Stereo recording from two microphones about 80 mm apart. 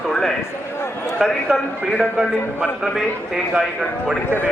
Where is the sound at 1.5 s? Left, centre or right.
Centre.